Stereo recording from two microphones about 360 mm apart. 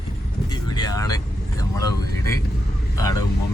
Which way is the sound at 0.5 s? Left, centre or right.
Centre.